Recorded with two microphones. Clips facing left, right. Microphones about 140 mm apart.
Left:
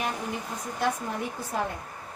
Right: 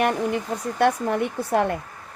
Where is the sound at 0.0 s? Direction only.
65° right (ahead or behind).